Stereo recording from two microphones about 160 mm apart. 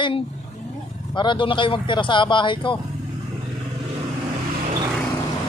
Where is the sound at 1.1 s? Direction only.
30° left (ahead or behind).